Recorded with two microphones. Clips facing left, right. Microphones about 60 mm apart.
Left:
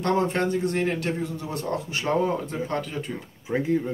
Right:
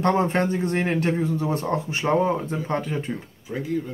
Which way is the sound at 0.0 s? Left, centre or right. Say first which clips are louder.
Right 2 dB; right.